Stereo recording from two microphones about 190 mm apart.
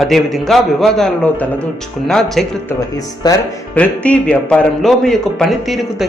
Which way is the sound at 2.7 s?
20° left (ahead or behind).